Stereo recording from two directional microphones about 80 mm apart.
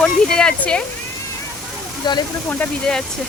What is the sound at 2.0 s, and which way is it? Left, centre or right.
Speech, left.